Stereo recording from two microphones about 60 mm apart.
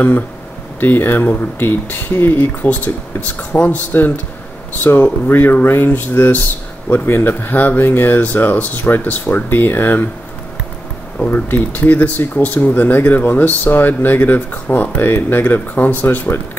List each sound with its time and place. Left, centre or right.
0.7 s speech: left
11.2 s speech: left